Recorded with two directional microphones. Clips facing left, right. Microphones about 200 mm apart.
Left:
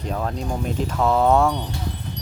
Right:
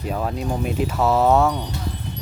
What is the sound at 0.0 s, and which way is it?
Speech, 5° right (ahead or behind).